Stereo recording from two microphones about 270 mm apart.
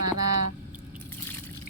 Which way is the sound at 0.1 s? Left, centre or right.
Right.